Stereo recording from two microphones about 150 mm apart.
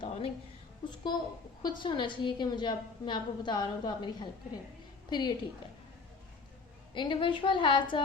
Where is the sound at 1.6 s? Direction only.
30° left (ahead or behind).